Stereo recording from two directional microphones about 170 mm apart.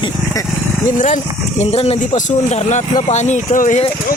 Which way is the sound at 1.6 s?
35° left (ahead or behind).